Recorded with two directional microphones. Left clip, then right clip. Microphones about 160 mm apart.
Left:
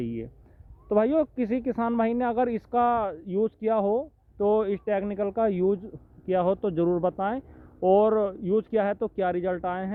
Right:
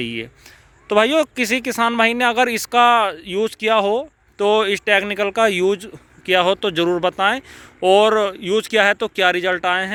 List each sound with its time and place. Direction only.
0.0 s speech: 10° right (ahead or behind)